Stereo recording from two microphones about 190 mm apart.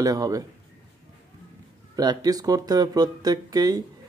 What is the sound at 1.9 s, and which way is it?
Speech, 20° right (ahead or behind).